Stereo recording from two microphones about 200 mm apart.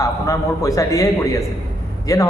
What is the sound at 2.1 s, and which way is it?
Speech, 15° left (ahead or behind).